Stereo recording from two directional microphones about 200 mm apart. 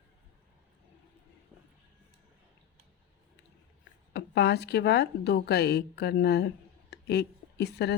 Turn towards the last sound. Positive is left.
turn(degrees=55)  # may be behind; listen again after turning